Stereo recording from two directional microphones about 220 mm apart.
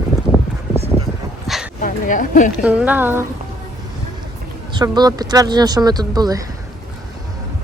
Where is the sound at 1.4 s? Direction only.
Centre (ahead or behind).